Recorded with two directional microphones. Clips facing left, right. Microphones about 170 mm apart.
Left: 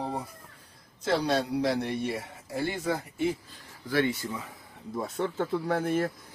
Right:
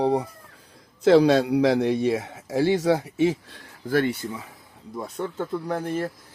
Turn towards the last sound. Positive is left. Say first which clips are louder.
# even
turn(degrees=10)  # may be behind; listen again after turning